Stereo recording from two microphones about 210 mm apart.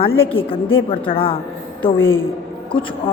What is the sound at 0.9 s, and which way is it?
Speech, 25° left (ahead or behind).